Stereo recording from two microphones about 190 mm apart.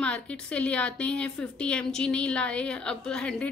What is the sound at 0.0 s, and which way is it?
A woman's voice, 5° left (ahead or behind).